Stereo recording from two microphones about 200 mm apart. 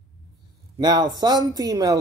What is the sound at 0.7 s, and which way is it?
Speech, 20° right (ahead or behind).